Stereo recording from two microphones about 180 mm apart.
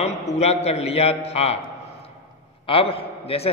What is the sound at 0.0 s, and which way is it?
A man's voice, 35° left (ahead or behind).